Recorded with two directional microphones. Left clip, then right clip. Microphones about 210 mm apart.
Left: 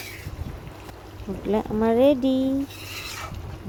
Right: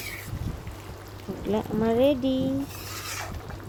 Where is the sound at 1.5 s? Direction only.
20° left (ahead or behind).